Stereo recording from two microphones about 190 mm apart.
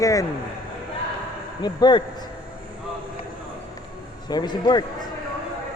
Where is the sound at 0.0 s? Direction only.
15° left (ahead or behind).